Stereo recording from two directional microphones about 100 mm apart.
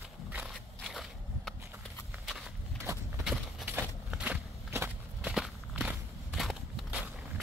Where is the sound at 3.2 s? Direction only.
10° right (ahead or behind).